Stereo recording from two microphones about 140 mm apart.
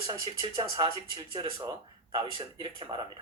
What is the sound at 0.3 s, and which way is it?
A man's voice, 40° right (ahead or behind).